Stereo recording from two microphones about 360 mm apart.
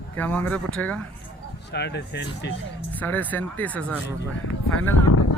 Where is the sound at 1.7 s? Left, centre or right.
Left.